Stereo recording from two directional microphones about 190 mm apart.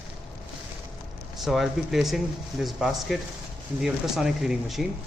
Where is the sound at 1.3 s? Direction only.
Centre (ahead or behind).